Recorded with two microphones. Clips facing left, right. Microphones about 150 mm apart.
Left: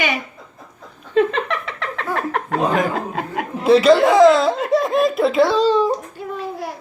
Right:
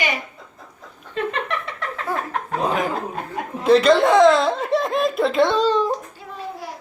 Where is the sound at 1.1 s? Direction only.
90° left.